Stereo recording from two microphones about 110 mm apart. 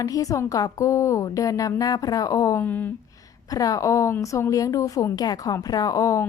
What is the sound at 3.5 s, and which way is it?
Speech, 30° left (ahead or behind).